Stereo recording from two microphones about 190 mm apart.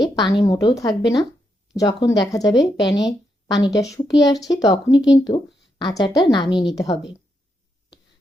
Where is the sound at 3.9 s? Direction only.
20° left (ahead or behind).